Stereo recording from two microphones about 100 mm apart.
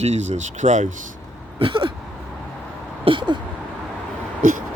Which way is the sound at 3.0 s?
55° right (ahead or behind).